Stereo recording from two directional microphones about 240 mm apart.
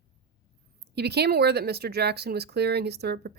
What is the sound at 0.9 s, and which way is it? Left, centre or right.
A woman's voice, right.